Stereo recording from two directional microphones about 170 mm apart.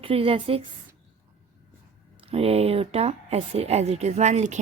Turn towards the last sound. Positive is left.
turn(degrees=-45)  # may be behind; listen again after turning